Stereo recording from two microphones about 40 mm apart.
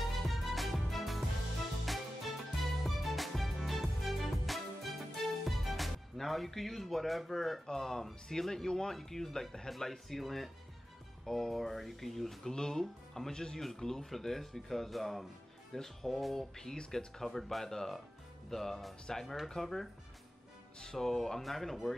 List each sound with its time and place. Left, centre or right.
0.1 s music: centre
7.6 s speech: centre
12.4 s speech: centre
16.3 s speech: centre